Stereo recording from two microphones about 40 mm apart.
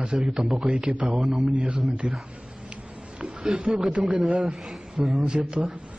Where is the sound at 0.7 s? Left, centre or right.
Right.